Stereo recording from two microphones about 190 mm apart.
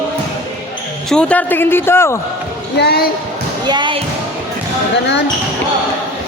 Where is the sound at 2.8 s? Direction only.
55° left (ahead or behind).